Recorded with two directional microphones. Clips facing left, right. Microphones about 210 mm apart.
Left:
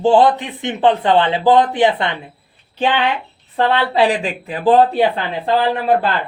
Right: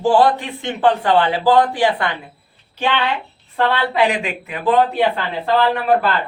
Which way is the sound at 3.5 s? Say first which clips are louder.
Left 2 dB; 30° left (ahead or behind).